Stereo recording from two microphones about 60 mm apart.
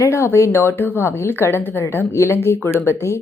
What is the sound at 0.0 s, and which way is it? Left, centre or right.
A woman's voice, left.